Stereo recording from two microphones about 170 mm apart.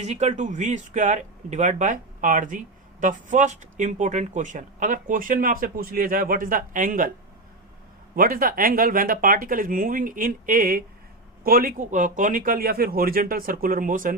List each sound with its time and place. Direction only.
0.0 s speech: 40° right (ahead or behind)
8.1 s speech: 55° right (ahead or behind)